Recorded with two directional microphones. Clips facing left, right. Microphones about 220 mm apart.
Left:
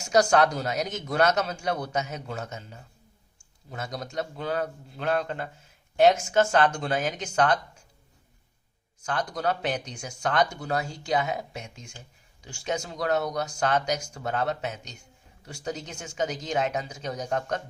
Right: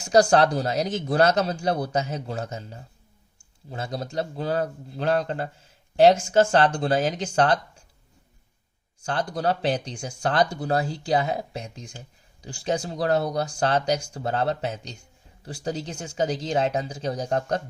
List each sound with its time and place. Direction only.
0.0 s speech: 35° right (ahead or behind)
9.0 s speech: 30° right (ahead or behind)